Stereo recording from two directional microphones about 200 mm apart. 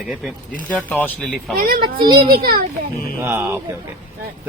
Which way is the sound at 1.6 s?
45° right (ahead or behind).